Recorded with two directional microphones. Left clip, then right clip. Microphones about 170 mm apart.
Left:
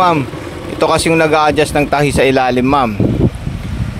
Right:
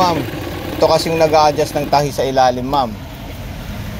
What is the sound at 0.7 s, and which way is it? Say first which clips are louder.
Speech: left 2 dB; 45° left (ahead or behind).